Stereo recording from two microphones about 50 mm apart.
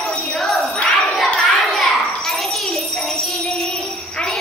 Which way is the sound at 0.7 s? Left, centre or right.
Centre.